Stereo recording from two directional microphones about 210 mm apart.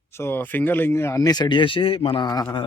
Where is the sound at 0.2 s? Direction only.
10° left (ahead or behind).